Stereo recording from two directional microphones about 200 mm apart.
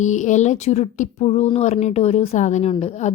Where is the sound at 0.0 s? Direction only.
35° left (ahead or behind).